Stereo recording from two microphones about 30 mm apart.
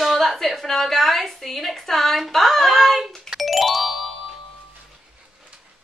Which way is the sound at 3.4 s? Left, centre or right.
Centre.